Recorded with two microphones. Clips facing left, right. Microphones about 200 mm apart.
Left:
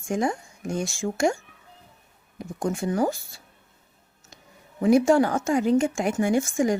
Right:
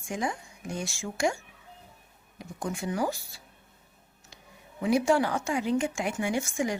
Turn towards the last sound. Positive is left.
turn(degrees=45)  # may be behind; listen again after turning